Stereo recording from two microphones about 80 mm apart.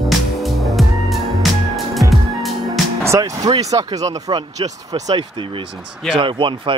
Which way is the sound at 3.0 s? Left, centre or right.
Right.